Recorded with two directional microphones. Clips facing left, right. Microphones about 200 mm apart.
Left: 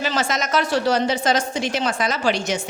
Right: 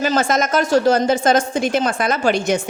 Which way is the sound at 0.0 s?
50° right (ahead or behind).